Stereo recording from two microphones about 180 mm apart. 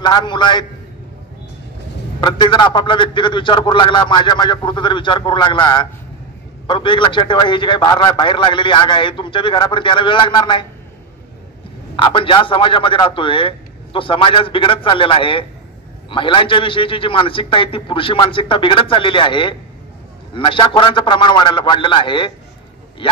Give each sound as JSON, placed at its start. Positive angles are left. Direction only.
{"t": 0.0, "sound": "a man's voice", "side_deg": 25}
{"t": 2.1, "sound": "a man's voice", "side_deg": 25}
{"t": 12.0, "sound": "a man's voice", "side_deg": 30}